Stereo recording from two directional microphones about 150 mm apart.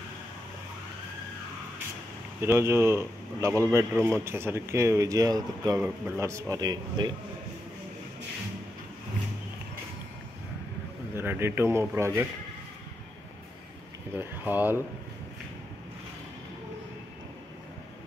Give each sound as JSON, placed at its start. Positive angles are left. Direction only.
{"t": 2.4, "sound": "speech", "side_deg": -15}
{"t": 11.1, "sound": "speech", "side_deg": -15}
{"t": 14.1, "sound": "speech", "side_deg": -10}